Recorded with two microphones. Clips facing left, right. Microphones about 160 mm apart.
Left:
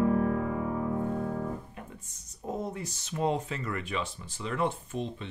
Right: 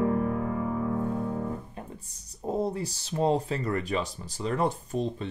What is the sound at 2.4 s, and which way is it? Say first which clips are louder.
Speech: right 6 dB; 35° right (ahead or behind).